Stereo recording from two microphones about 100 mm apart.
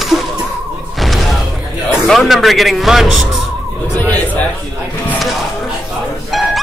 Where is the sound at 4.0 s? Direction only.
15° left (ahead or behind).